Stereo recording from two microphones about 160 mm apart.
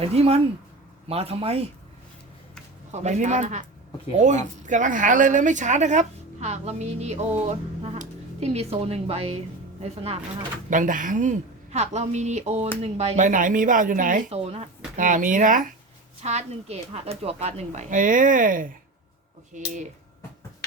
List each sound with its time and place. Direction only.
0.0 s speech: 40° right (ahead or behind)
2.9 s a woman's voice: 45° right (ahead or behind)
10.7 s a woman's voice: 55° right (ahead or behind)
16.2 s a woman's voice: 45° right (ahead or behind)